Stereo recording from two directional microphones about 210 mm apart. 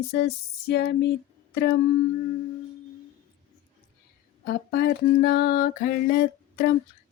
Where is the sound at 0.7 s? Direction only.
50° left (ahead or behind).